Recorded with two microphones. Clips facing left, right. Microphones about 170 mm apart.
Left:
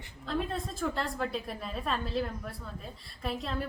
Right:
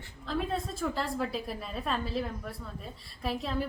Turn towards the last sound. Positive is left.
turn(degrees=0)  # may be behind; listen again after turning